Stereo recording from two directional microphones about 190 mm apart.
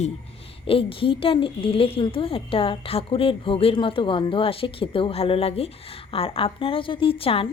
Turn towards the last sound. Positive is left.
turn(degrees=30)  # may be behind; listen again after turning